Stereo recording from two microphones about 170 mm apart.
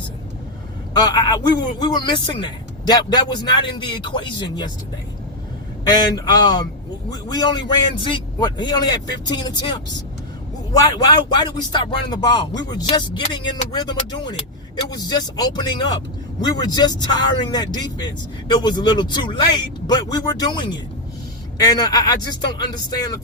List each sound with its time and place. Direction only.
0.9 s speech: 25° left (ahead or behind)
5.8 s speech: 25° left (ahead or behind)